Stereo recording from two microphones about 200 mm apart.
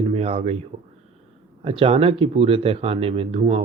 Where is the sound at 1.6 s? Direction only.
30° right (ahead or behind).